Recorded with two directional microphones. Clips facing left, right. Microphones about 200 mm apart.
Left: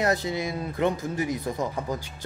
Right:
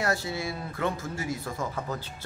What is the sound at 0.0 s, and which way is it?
Speech, 20° left (ahead or behind).